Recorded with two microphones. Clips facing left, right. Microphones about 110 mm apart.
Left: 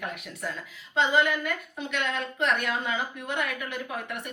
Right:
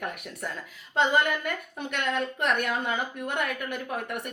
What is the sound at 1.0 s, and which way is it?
A woman's voice, 50° right (ahead or behind).